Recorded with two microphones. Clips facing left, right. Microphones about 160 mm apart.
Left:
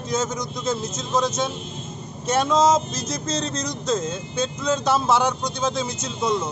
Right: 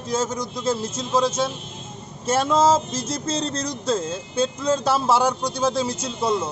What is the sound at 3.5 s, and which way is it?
Speech, 30° right (ahead or behind).